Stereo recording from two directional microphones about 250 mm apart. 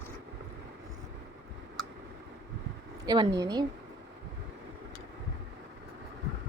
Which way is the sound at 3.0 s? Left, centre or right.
Centre.